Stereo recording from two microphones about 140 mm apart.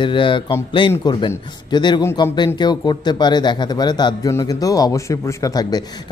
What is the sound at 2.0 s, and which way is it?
Speech, 20° left (ahead or behind).